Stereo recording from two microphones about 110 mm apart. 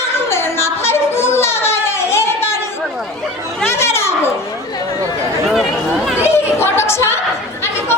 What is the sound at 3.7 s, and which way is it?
Children playing, 25° left (ahead or behind).